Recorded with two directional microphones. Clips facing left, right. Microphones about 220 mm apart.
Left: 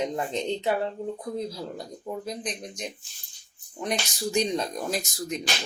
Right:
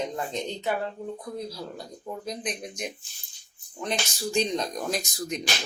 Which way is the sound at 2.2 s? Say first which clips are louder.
Even; centre (ahead or behind).